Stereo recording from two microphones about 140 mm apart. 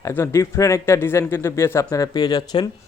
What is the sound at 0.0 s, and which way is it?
Speech, 20° left (ahead or behind).